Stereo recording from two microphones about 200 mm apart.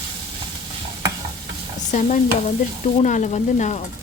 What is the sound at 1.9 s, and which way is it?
Speech, 40° left (ahead or behind).